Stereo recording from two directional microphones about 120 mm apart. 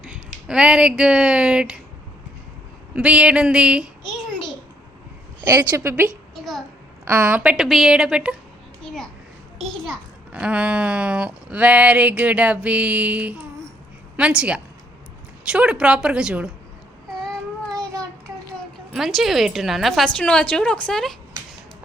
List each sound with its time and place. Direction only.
0.4 s speech: 10° right (ahead or behind)
2.9 s speech: 10° right (ahead or behind)
5.5 s a woman's voice: 25° right (ahead or behind)
6.3 s a child's voice: centre (ahead or behind)
7.1 s speech: 10° right (ahead or behind)
8.8 s a sound: 5° left (ahead or behind)
9.6 s speech: centre (ahead or behind)
10.3 s speech: 10° right (ahead or behind)
18.9 s speech: centre (ahead or behind)